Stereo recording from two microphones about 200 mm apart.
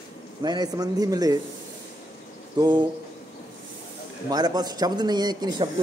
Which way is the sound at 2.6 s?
20° right (ahead or behind).